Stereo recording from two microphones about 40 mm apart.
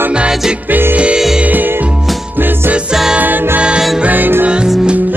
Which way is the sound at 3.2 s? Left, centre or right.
Right.